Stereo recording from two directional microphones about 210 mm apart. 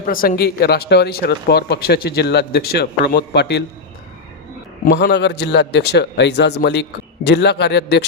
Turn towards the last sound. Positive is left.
turn(degrees=55)  # may be behind; listen again after turning